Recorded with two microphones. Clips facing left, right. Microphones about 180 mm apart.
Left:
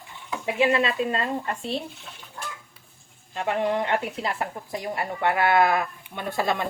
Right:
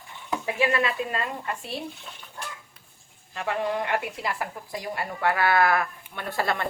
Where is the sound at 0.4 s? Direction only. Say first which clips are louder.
Left 3 dB; 25° left (ahead or behind).